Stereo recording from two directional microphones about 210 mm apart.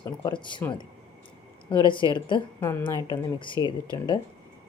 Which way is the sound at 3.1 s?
20° left (ahead or behind).